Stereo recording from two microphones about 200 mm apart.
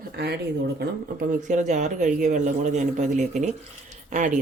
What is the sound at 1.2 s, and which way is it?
A man's voice, 40° right (ahead or behind).